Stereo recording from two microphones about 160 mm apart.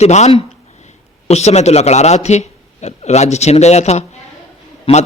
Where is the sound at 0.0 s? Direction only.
45° left (ahead or behind).